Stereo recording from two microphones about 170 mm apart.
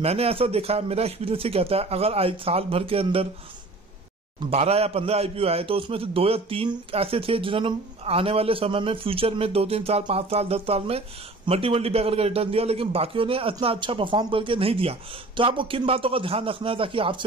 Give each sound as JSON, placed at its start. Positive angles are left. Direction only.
{"t": 0.0, "sound": "a man's voice", "side_deg": -35}
{"t": 4.4, "sound": "a man's voice", "side_deg": -35}